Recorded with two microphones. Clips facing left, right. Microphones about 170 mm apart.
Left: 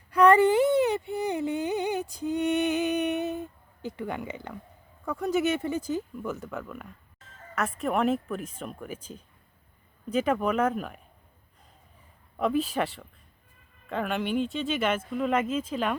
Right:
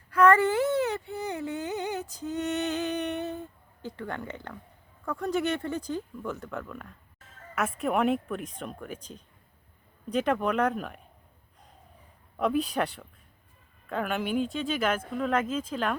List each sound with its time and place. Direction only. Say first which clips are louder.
0.1 s a sound: left 2 dB; 15° left (ahead or behind)
2.1 s lullaby: left 5 dB; 15° left (ahead or behind)
3.8 s speech: left 3 dB; 10° left (ahead or behind)
12.4 s speech: even; centre (ahead or behind)